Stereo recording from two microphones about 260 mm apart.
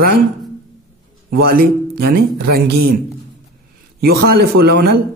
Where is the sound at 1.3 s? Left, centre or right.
Right.